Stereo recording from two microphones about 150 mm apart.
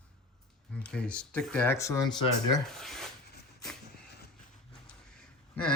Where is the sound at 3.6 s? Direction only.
5° left (ahead or behind).